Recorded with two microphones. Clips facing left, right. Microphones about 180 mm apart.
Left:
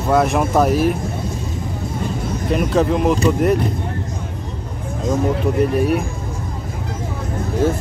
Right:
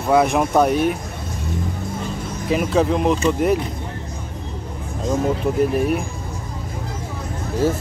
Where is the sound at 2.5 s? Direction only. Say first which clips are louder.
Left 1 dB; centre (ahead or behind).